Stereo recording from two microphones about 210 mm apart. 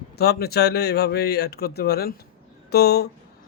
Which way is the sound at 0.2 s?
50° left (ahead or behind).